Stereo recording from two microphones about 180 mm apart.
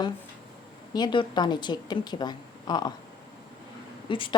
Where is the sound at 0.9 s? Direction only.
25° left (ahead or behind).